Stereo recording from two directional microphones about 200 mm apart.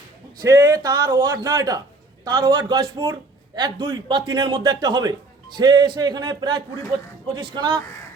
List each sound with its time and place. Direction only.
0.4 s a man's voice: 15° right (ahead or behind)